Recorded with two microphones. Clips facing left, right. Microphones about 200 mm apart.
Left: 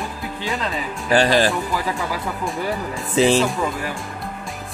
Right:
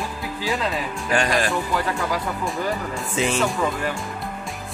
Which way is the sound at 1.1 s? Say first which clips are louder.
Left 5 dB; 35° left (ahead or behind).